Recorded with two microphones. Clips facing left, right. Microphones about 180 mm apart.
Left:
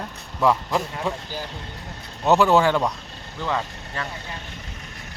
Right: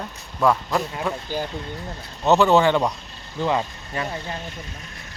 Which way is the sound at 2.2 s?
10° left (ahead or behind).